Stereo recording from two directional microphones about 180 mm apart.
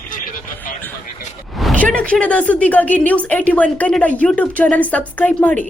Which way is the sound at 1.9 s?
5° left (ahead or behind).